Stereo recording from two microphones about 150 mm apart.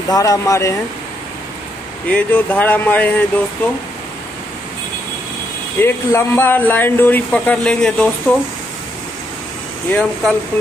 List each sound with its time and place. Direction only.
0.1 s speech: 25° left (ahead or behind)
2.0 s speech: 10° left (ahead or behind)
5.8 s speech: 15° left (ahead or behind)
9.8 s speech: 5° left (ahead or behind)